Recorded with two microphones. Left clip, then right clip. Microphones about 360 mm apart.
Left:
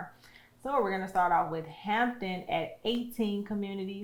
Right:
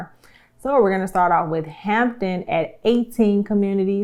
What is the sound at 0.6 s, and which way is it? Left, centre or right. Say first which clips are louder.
Speech: right 12 dB; right.